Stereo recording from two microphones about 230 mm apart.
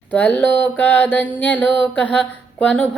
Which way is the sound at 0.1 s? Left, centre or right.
Centre.